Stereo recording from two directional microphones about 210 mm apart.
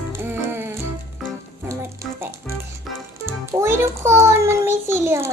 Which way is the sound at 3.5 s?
15° right (ahead or behind).